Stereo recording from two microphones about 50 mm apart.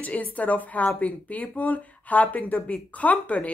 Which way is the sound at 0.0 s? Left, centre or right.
Left.